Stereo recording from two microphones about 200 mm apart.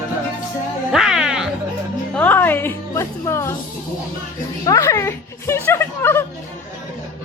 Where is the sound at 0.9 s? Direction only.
5° right (ahead or behind).